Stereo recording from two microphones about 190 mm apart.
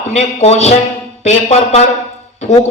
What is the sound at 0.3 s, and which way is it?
A man's voice, 35° left (ahead or behind).